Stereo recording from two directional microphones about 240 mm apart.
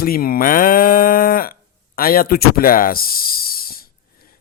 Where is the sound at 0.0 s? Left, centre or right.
Left.